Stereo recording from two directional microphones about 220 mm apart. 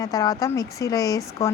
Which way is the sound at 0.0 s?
15° left (ahead or behind).